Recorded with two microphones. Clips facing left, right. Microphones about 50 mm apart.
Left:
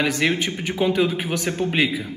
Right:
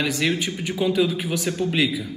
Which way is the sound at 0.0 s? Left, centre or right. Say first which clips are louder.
Left 2 dB; left.